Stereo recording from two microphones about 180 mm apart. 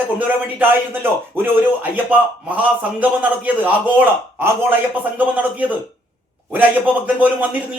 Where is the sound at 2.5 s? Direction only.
10° right (ahead or behind).